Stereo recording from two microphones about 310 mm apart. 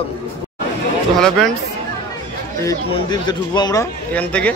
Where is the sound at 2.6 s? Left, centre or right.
Centre.